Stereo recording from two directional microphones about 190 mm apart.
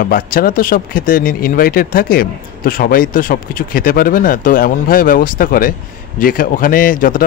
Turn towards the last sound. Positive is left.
turn(degrees=45)  # may be behind; listen again after turning